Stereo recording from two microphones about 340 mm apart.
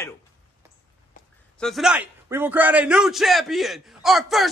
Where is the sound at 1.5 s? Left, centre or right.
Centre.